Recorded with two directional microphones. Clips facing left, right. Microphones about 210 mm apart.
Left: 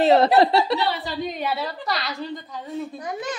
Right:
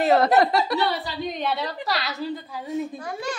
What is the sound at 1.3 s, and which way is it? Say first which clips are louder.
A woman's voice: even; 5° left (ahead or behind).